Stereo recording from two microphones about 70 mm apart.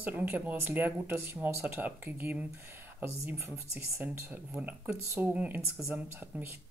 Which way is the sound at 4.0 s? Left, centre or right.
Right.